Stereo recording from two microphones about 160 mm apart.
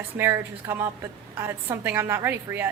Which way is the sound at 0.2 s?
15° right (ahead or behind).